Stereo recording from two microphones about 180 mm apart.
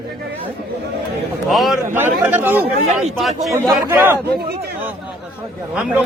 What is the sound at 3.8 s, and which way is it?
Speech, 10° right (ahead or behind).